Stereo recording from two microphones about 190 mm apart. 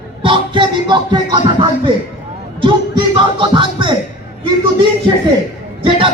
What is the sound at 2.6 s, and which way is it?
Music, 25° right (ahead or behind).